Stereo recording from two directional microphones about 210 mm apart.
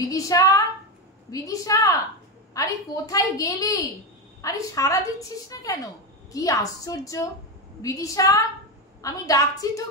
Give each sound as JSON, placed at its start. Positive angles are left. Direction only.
{"t": 0.0, "sound": "a woman's voice", "side_deg": 15}